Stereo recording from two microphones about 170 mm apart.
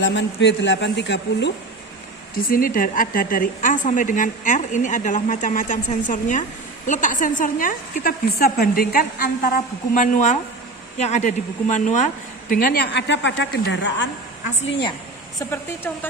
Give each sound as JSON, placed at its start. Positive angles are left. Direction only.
{"t": 0.0, "sound": "a man's voice", "side_deg": 90}
{"t": 2.3, "sound": "a woman's voice", "side_deg": 60}
{"t": 15.4, "sound": "a woman's voice", "side_deg": 10}